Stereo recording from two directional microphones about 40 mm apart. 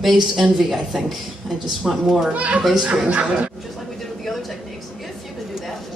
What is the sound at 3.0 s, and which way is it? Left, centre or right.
Speech, right.